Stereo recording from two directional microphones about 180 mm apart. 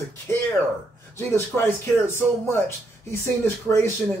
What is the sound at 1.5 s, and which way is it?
Speech, 5° left (ahead or behind).